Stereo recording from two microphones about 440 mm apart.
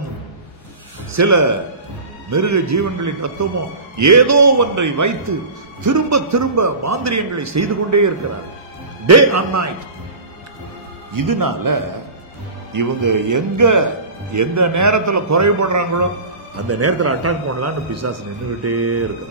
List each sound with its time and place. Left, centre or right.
1.1 s a man's voice: right
11.1 s a man's voice: right